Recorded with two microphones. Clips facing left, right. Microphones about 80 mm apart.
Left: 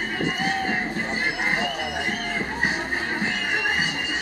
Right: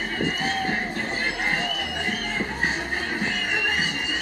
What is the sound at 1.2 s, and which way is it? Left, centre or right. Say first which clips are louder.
Music: left 2 dB; centre.